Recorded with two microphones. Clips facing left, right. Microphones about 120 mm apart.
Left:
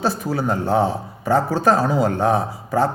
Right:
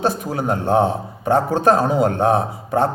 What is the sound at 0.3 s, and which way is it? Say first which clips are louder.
Speech: right 1 dB; 20° right (ahead or behind).